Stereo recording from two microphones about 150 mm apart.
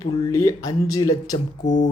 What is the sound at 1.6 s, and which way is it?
Speech, 55° left (ahead or behind).